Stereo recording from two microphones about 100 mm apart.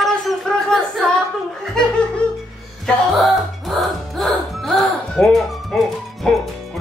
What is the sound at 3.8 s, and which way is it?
Speech, centre (ahead or behind).